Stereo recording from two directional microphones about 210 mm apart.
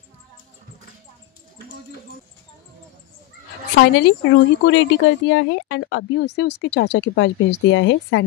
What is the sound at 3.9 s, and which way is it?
A woman's voice, 60° left (ahead or behind).